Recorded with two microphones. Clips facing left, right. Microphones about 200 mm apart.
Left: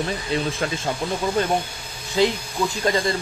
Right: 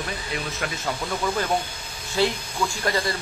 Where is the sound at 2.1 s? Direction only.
20° left (ahead or behind).